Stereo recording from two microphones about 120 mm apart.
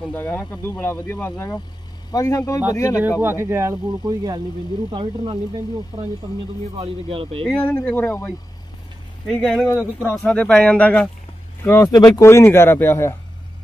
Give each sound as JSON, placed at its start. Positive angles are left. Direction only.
{"t": 0.1, "sound": "a man's voice", "side_deg": 15}
{"t": 3.2, "sound": "speech", "side_deg": -20}
{"t": 4.0, "sound": "speech", "side_deg": -35}
{"t": 4.9, "sound": "speech", "side_deg": -45}
{"t": 6.8, "sound": "speech", "side_deg": -50}
{"t": 7.4, "sound": "speech", "side_deg": 15}
{"t": 9.3, "sound": "speech", "side_deg": 5}
{"t": 11.6, "sound": "a man's voice", "side_deg": 25}